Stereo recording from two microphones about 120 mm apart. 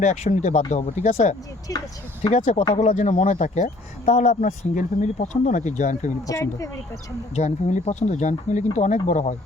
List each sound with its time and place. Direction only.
0.0 s speech: 85° left
1.7 s speech: 25° left (ahead or behind)
2.3 s speech: 90° left
2.7 s speech: 75° left (ahead or behind)
6.2 s speech: 25° left (ahead or behind)
7.3 s speech: 75° left (ahead or behind)